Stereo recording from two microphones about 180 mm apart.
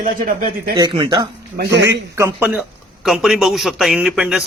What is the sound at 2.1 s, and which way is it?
Speech, 15° right (ahead or behind).